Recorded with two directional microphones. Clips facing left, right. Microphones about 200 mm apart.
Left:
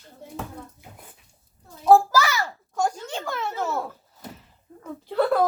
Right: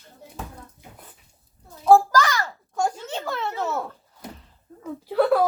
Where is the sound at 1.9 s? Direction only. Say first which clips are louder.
Right 1 dB; 5° left (ahead or behind).